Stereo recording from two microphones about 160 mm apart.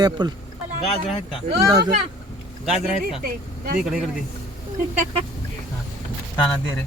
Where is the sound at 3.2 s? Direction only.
65° right (ahead or behind).